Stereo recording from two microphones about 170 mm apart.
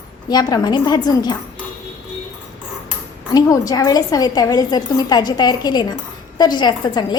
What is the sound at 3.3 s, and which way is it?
A woman's voice, 20° left (ahead or behind).